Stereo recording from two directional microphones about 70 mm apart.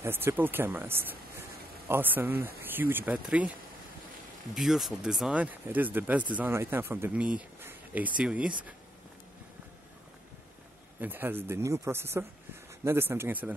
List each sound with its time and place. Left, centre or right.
0.0 s speech: right
4.6 s speech: centre
5.3 s speech: right
6.5 s speech: right
7.1 s speech: centre
11.0 s speech: right
11.6 s speech: right